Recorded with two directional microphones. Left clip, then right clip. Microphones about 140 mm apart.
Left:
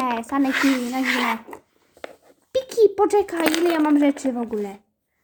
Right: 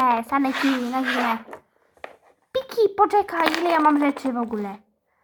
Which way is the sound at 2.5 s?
15° left (ahead or behind).